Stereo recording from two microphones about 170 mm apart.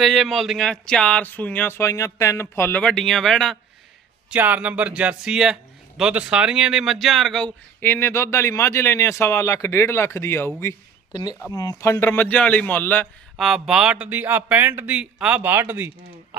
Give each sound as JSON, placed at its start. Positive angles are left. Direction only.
{"t": 0.0, "sound": "speech", "side_deg": 0}
{"t": 4.3, "sound": "speech", "side_deg": -10}
{"t": 13.3, "sound": "speech", "side_deg": 0}